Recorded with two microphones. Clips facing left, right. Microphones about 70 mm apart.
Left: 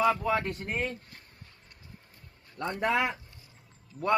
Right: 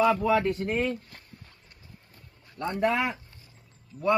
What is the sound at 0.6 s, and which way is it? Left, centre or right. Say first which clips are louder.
Speech: right 5 dB; right.